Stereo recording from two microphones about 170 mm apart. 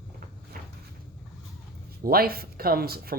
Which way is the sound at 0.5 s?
60° right (ahead or behind).